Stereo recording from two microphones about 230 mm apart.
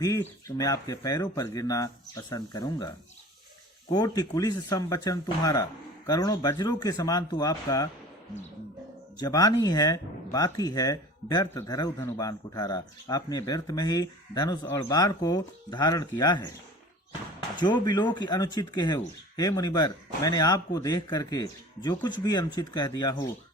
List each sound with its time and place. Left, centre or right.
0.0 s speech: centre
9.1 s speech: centre
17.6 s speech: centre